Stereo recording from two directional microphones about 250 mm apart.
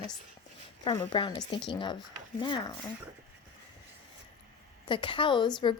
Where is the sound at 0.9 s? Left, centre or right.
Centre.